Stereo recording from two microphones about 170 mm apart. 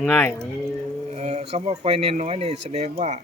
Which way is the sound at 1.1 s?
40° right (ahead or behind).